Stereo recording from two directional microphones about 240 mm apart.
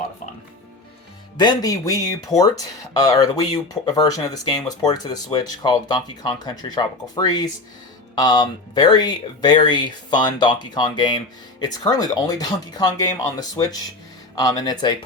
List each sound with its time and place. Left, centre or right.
1.4 s speech: centre